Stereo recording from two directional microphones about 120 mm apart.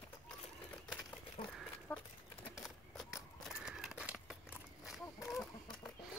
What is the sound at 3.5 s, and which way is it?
Crumpling, 5° right (ahead or behind).